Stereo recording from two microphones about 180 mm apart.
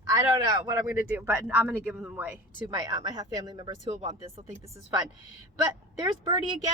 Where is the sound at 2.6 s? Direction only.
20° right (ahead or behind).